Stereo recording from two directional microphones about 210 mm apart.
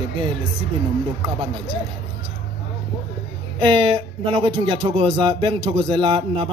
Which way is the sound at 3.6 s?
20° right (ahead or behind).